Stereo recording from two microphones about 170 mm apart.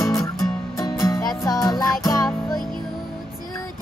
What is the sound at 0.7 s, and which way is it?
Music, 20° left (ahead or behind).